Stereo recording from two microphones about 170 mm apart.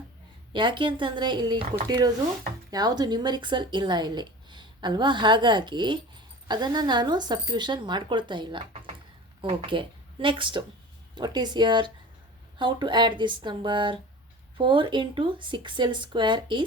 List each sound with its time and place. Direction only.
0.5 s speech: 30° right (ahead or behind)
2.6 s speech: 25° right (ahead or behind)